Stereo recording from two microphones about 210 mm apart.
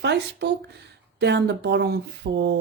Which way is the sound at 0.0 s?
55° right (ahead or behind).